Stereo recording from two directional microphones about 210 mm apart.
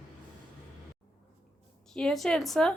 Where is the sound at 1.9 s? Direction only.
5° left (ahead or behind).